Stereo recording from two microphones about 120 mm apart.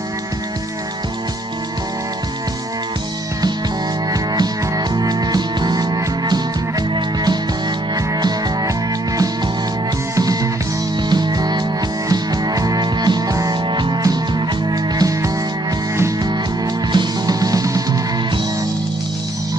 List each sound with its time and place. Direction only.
4.1 s music: 35° right (ahead or behind)
10.1 s music: 30° right (ahead or behind)
16.9 s music: 35° right (ahead or behind)